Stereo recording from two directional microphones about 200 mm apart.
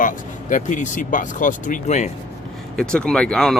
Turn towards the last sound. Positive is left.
turn(degrees=5)  # may be behind; listen again after turning